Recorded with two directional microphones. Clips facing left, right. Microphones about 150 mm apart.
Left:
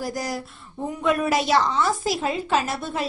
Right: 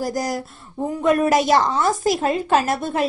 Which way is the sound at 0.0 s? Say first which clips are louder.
Right 5 dB; 40° right (ahead or behind).